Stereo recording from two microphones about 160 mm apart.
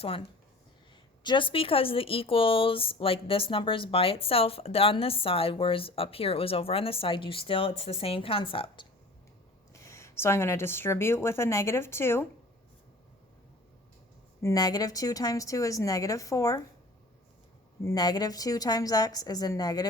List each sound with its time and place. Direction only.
1.2 s speech: 30° left (ahead or behind)
9.8 s speech: 20° left (ahead or behind)
14.4 s a woman's voice: 25° left (ahead or behind)
17.8 s a woman's voice: 25° left (ahead or behind)